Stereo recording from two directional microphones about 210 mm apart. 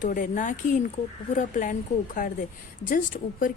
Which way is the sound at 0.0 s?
40° left (ahead or behind).